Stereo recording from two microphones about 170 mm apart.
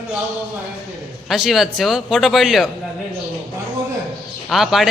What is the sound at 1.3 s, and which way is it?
A man's voice, centre (ahead or behind).